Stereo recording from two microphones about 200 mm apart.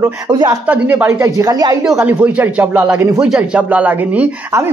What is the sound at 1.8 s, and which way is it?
Speech, 5° right (ahead or behind).